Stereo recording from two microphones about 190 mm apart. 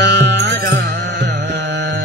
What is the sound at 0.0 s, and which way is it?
Music, 65° right (ahead or behind).